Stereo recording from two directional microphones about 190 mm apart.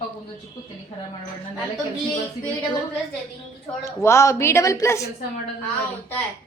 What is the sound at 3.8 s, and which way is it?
A woman's voice, 15° left (ahead or behind).